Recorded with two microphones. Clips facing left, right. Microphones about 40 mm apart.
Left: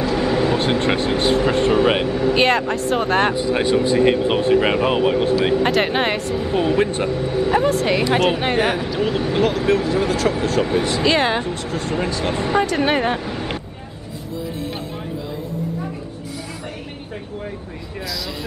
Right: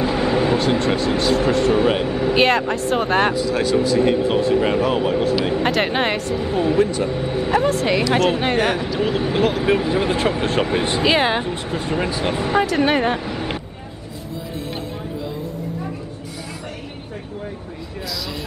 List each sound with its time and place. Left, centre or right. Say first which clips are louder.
0.0 s vehicle: even; centre
0.6 s speech: even; left
2.0 s speech: even; centre
3.3 s a man's voice: left 1 dB; left
5.6 s speech: left 1 dB; centre
6.8 s speech: right 1 dB; left
7.1 s speech: left 1 dB; centre; by 11.0 s right
11.0 s speech: right 2 dB; centre